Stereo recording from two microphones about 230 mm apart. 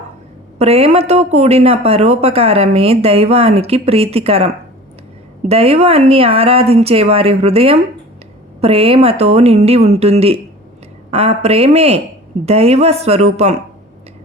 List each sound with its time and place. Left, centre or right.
0.6 s speech: right